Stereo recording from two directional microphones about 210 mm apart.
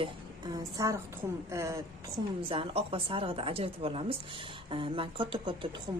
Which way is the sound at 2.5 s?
25° right (ahead or behind).